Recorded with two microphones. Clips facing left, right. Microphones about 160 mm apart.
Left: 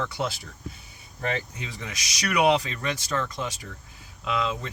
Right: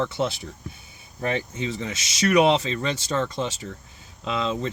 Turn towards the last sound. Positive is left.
turn(degrees=-25)  # may be behind; listen again after turning